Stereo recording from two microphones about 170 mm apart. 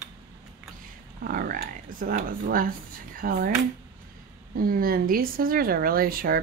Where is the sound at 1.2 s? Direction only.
60° right (ahead or behind).